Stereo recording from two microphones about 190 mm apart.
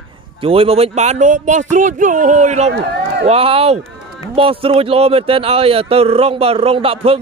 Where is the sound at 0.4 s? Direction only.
30° right (ahead or behind).